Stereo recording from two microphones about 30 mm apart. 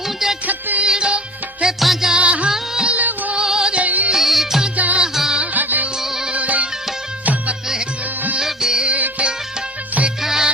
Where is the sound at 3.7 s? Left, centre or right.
Right.